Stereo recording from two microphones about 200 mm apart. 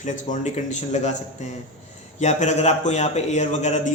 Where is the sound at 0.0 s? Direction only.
40° left (ahead or behind).